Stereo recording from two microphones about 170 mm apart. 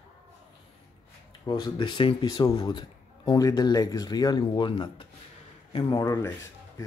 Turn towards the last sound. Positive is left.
turn(degrees=30)  # may be behind; listen again after turning